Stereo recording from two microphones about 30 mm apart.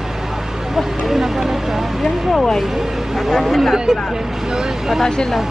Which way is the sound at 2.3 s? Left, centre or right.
Centre.